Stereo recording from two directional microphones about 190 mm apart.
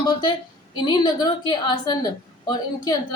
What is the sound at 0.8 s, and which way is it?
A woman's voice, 20° left (ahead or behind).